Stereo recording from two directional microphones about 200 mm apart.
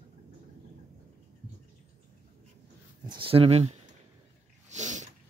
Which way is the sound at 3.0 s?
25° right (ahead or behind).